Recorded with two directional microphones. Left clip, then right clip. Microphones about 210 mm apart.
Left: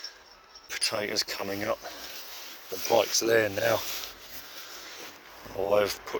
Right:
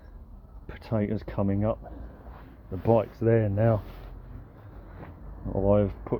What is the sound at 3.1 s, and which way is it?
Speech, 5° left (ahead or behind).